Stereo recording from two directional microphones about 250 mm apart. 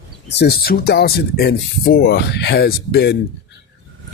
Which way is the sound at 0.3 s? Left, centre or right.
Left.